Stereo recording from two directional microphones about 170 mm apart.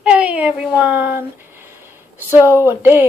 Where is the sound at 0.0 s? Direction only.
5° right (ahead or behind).